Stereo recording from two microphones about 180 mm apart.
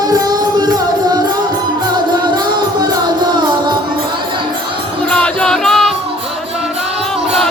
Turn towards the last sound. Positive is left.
turn(degrees=0)  # may be behind; listen again after turning